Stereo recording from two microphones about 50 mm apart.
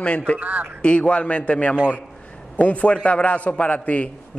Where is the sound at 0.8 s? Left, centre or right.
Left.